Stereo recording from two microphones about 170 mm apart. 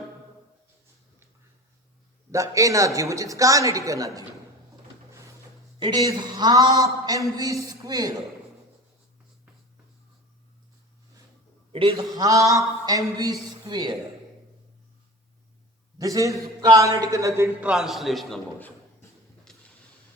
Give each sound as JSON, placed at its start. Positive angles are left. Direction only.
{"t": 2.3, "sound": "a man's voice", "side_deg": -20}
{"t": 5.8, "sound": "a man's voice", "side_deg": -20}
{"t": 11.7, "sound": "a man's voice", "side_deg": -35}
{"t": 11.9, "sound": "a man's voice", "side_deg": -20}
{"t": 16.0, "sound": "a man's voice", "side_deg": -20}
{"t": 19.5, "sound": "a sound", "side_deg": 5}